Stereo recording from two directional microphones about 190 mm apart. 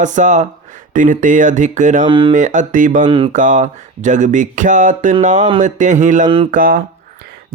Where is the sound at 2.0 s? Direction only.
25° right (ahead or behind).